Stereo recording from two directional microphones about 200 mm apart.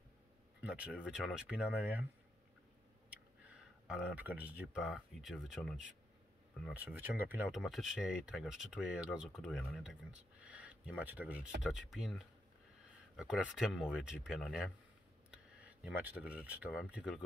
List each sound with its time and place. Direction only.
0.6 s speech: 5° right (ahead or behind)
3.1 s speech: 5° right (ahead or behind)
6.8 s speech: 10° right (ahead or behind)